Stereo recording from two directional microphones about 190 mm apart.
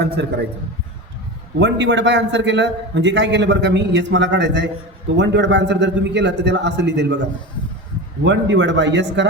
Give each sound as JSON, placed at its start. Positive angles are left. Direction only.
{"t": 0.2, "sound": "a man's voice", "side_deg": -65}
{"t": 1.5, "sound": "a man's voice", "side_deg": -70}
{"t": 8.2, "sound": "a man's voice", "side_deg": -70}